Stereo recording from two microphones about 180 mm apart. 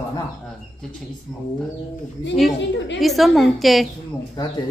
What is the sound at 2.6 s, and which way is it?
Speech, 75° left (ahead or behind).